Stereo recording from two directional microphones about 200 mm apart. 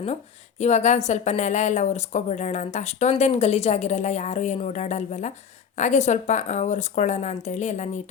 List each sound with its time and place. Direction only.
0.6 s a woman's voice: 35° left (ahead or behind)